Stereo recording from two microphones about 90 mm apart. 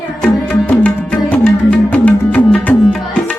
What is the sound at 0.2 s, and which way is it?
Music, 15° left (ahead or behind).